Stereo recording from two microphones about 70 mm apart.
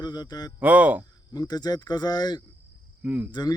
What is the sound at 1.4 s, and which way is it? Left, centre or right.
Speech, left.